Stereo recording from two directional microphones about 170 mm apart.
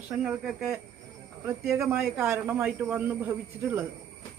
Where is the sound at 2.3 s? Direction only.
10° right (ahead or behind).